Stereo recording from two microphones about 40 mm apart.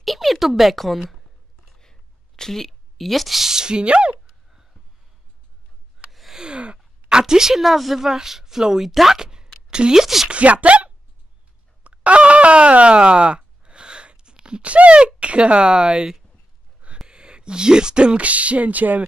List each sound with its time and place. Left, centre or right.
0.0 s a child's voice: centre
1.8 s a sound: centre; by 4.6 s right
6.3 s a sound: right
9.7 s speech: centre
10.0 s speech: centre
10.3 s speech: right
17.1 s speech: right
18.2 s speech: right